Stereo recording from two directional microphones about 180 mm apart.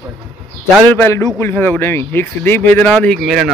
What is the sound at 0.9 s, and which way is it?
A man's voice, 10° left (ahead or behind).